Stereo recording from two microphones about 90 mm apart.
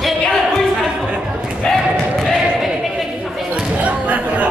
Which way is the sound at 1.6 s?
5° left (ahead or behind).